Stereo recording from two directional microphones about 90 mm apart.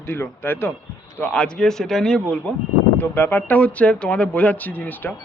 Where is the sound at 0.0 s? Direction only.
25° left (ahead or behind).